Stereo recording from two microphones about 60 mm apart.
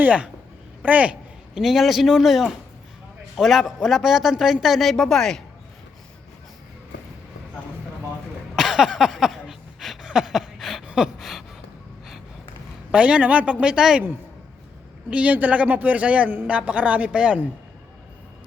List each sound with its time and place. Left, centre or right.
0.0 s speech: right
1.5 s a man's voice: centre
8.5 s a sound: centre
12.9 s a man's voice: centre
15.1 s speech: right